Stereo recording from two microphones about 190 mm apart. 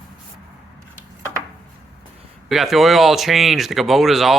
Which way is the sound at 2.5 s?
Centre (ahead or behind).